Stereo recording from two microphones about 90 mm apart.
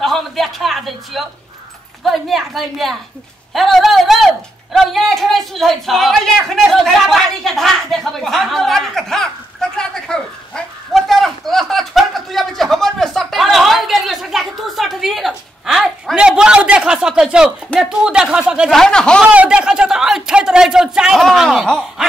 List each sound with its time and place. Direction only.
0.0 s speech: centre (ahead or behind)
18.7 s speech: 5° left (ahead or behind)
19.2 s speech: 15° right (ahead or behind)